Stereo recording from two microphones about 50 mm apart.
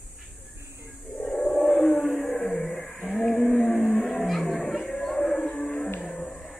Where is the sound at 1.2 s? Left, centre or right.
Centre.